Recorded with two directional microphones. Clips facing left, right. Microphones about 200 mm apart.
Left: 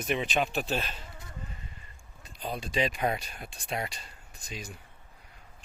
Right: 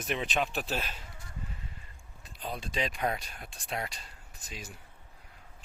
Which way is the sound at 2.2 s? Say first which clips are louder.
Left 3 dB; centre (ahead or behind).